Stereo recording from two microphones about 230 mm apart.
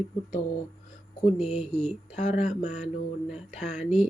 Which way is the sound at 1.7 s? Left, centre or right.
Centre.